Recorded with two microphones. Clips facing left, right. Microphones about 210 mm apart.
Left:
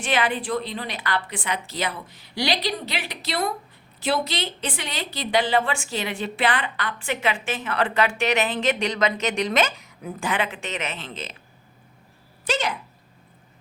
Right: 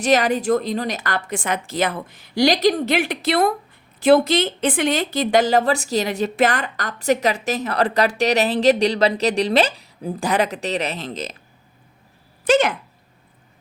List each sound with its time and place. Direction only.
0.0 s a woman's voice: 40° right (ahead or behind)
12.5 s a woman's voice: 50° right (ahead or behind)